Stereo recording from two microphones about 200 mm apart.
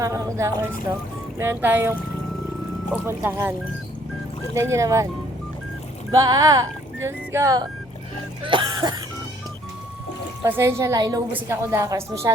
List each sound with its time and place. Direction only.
0.0 s a woman's voice: 15° right (ahead or behind)
4.5 s a woman's voice: 15° right (ahead or behind)
6.1 s speech: 20° right (ahead or behind)
8.4 s a sound: 20° right (ahead or behind)
10.4 s a woman's voice: 15° right (ahead or behind)